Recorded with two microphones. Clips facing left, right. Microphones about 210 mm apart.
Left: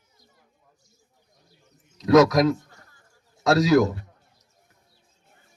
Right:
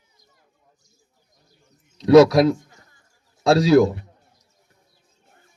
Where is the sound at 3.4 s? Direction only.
30° right (ahead or behind).